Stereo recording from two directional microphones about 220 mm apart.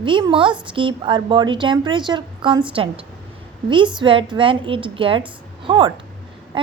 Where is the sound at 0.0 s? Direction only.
20° right (ahead or behind).